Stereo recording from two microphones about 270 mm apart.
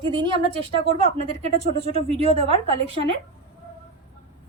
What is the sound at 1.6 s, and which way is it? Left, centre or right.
Speech, left.